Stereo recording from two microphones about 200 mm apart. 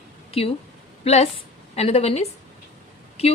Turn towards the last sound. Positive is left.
turn(degrees=30)  # may be behind; listen again after turning